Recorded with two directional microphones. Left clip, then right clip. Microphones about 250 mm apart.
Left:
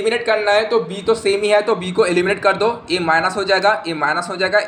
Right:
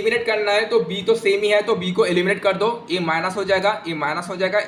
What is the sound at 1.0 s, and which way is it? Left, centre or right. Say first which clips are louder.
Speech: left 1 dB; centre.